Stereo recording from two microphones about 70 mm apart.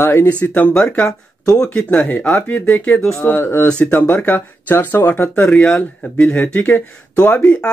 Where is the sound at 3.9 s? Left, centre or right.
Left.